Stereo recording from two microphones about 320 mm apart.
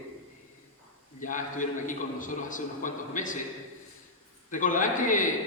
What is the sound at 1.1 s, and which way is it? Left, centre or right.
A man's voice, left.